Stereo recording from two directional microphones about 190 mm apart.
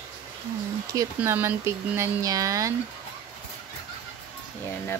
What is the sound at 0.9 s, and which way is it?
Speech, 15° right (ahead or behind).